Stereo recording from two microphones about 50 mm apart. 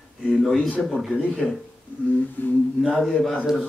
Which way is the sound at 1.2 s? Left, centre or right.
Left.